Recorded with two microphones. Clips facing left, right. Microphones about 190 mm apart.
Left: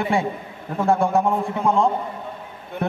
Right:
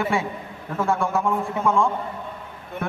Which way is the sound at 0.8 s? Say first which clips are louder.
Left 4 dB; 30° left (ahead or behind).